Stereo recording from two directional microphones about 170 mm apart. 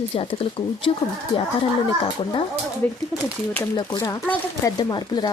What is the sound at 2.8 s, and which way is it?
Speech, 10° left (ahead or behind).